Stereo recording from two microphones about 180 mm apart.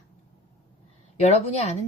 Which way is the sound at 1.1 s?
40° left (ahead or behind).